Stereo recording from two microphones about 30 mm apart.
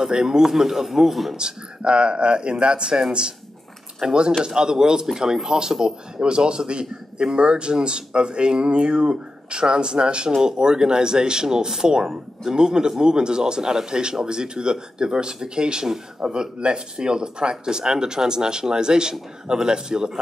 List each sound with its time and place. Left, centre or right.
0.0 s speech: right; by 1.3 s centre
1.3 s speech: right